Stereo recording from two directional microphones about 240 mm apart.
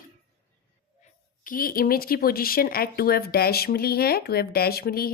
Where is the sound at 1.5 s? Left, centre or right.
Left.